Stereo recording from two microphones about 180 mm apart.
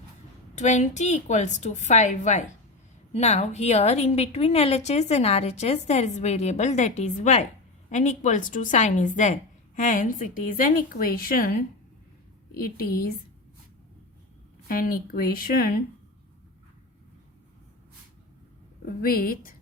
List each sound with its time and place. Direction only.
0.5 s a woman's voice: 40° left (ahead or behind)
12.5 s a woman's voice: 55° left (ahead or behind)
14.7 s a woman's voice: 55° left (ahead or behind)
19.0 s a woman's voice: 55° left (ahead or behind)